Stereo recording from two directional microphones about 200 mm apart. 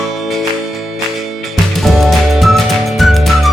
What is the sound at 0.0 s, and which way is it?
Music, centre (ahead or behind).